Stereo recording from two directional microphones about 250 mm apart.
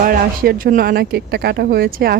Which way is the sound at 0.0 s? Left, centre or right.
Right.